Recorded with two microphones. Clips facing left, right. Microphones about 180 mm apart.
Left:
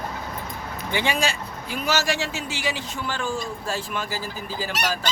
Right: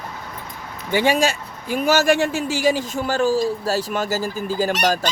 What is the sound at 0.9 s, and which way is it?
Speech, 45° right (ahead or behind).